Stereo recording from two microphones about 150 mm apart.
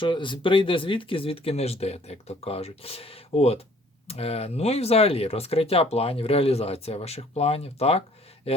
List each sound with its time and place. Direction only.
0.0 s speech: 35° left (ahead or behind)